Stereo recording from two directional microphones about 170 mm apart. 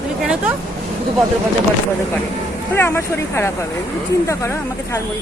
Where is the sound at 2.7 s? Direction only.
15° left (ahead or behind).